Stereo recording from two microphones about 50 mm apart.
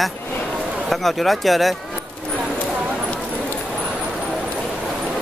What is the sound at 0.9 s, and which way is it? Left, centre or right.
Speech, centre.